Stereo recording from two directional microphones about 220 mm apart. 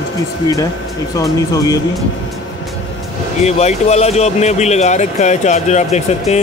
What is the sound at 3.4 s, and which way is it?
Speech, 30° left (ahead or behind).